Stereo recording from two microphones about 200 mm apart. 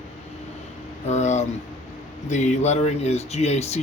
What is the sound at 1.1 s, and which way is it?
Speech, 35° left (ahead or behind).